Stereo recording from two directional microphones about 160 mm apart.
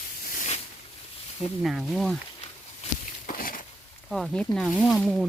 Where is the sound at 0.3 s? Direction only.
45° left (ahead or behind).